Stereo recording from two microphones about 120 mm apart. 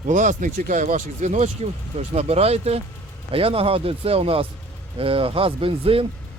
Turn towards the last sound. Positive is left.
turn(degrees=-50)  # may be behind; listen again after turning